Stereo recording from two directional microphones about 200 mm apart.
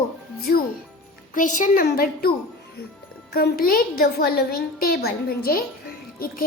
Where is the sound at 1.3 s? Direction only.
40° left (ahead or behind).